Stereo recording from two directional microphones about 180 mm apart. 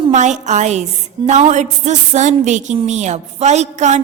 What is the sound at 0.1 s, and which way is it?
A woman's voice, 40° right (ahead or behind).